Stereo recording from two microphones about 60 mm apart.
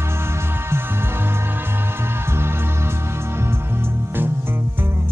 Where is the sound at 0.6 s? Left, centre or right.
Right.